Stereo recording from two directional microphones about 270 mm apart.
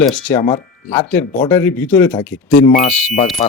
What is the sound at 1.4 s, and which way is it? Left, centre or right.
Speech, centre.